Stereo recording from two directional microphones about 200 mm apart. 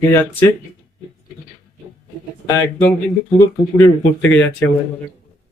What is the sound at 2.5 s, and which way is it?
Speech, 15° left (ahead or behind).